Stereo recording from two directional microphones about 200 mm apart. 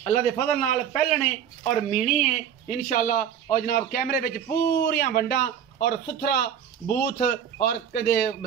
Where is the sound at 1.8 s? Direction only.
35° left (ahead or behind).